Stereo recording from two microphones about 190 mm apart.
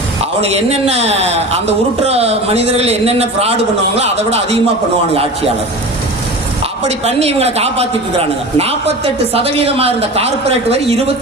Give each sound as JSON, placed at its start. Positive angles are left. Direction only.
{"t": 0.4, "sound": "a man's voice", "side_deg": -35}
{"t": 6.8, "sound": "a man's voice", "side_deg": -35}